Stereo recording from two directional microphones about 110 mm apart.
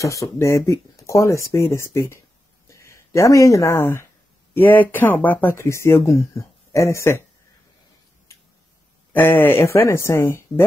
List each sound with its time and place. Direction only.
0.0 s speech: 30° left (ahead or behind)
9.1 s speech: 20° left (ahead or behind)